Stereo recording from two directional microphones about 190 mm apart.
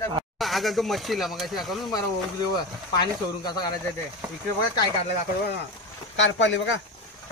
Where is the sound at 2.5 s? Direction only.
20° left (ahead or behind).